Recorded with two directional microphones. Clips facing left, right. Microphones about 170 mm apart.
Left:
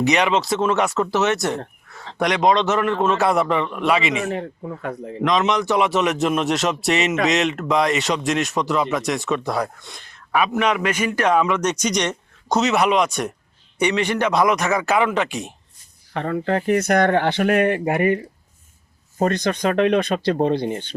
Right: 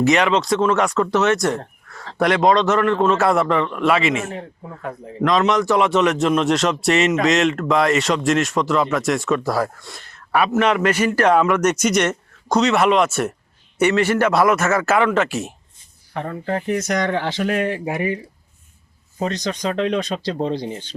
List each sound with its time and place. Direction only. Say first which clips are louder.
0.0 s speech: right 2 dB; centre (ahead or behind)
1.9 s a man's voice: right 3 dB; 25° left (ahead or behind)
2.6 s speech: right 3 dB; 5° left (ahead or behind)
4.3 s a man's voice: left 5 dB; 75° left (ahead or behind)
5.2 s a man's voice: right 2 dB; 20° left (ahead or behind)
5.6 s speech: right 2 dB; centre (ahead or behind)
9.8 s a sound: right 2 dB; centre (ahead or behind)
10.8 s a man's voice: right 4 dB; 10° left (ahead or behind)
11.4 s speech: right 4 dB; 10° right (ahead or behind)
14.5 s a man's voice: right 2 dB; 15° left (ahead or behind)
14.8 s speech: right 2 dB; centre (ahead or behind)
16.1 s speech: left 3 dB; 80° left; by 18.2 s 60° left (ahead or behind)
19.2 s speech: left 3 dB; 55° left (ahead or behind)